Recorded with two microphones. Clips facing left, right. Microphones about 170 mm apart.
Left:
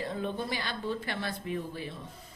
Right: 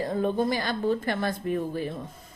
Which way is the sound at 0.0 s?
45° right (ahead or behind).